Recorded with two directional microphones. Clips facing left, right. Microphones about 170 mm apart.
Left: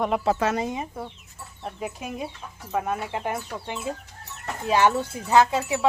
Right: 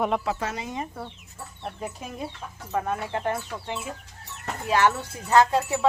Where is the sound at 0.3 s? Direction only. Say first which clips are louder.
Left 5 dB; 30° left (ahead or behind).